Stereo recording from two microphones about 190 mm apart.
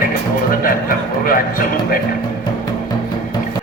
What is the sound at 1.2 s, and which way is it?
Speech, 50° left (ahead or behind).